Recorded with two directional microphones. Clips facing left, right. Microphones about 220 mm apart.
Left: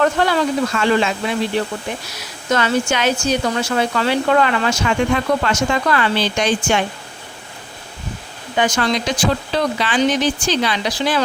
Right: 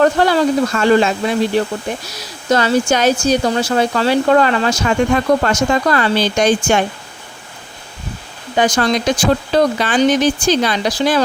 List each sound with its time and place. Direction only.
0.0 s speech: 35° right (ahead or behind)
8.5 s speech: 35° right (ahead or behind)